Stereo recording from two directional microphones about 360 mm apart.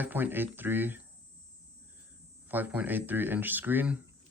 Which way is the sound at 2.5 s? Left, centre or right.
Centre.